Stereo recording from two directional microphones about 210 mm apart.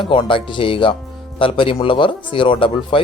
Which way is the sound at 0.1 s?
25° left (ahead or behind).